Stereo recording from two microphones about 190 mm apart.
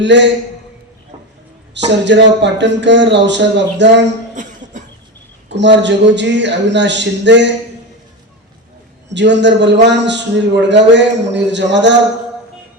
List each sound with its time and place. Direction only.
0.0 s a man's voice: 65° right (ahead or behind)
1.7 s a man's voice: 65° right (ahead or behind)
4.4 s cough: 40° right (ahead or behind)
5.5 s a man's voice: 65° right (ahead or behind)
9.0 s a man's voice: 65° right (ahead or behind)